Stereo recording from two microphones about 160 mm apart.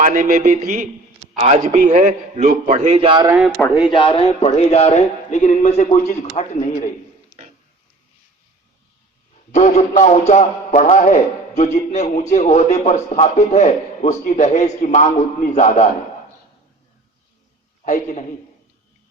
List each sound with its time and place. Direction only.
0.0 s a man's voice: 55° right (ahead or behind); by 3.2 s 40° right (ahead or behind)
3.8 s a man's voice: 30° left (ahead or behind); by 6.9 s 55° left (ahead or behind)
9.5 s a man's voice: 45° left (ahead or behind)
17.8 s a man's voice: 50° left (ahead or behind)